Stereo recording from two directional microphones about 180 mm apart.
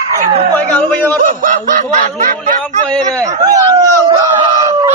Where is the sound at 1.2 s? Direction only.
45° right (ahead or behind).